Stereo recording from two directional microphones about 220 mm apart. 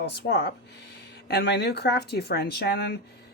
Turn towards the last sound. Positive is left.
turn(degrees=45)  # may be behind; listen again after turning